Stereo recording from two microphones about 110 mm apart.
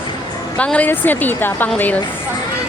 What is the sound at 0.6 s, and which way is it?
Speech, 10° left (ahead or behind).